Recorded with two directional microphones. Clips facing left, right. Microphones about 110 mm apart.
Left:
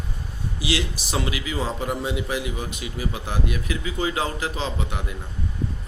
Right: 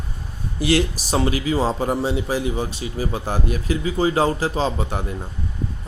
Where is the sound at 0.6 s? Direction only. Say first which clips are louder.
Right 8 dB; 45° right (ahead or behind).